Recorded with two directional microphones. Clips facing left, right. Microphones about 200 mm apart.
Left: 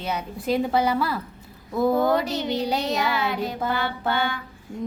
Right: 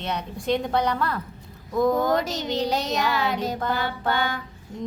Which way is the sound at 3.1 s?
40° right (ahead or behind).